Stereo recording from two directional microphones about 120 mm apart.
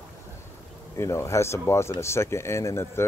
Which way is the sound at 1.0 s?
25° left (ahead or behind).